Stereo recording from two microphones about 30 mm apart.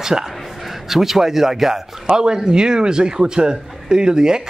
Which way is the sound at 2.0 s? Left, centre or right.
Right.